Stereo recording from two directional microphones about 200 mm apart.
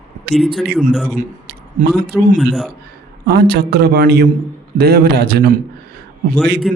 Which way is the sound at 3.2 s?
50° right (ahead or behind).